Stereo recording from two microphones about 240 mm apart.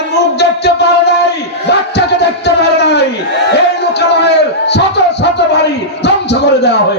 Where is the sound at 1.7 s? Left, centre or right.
Left.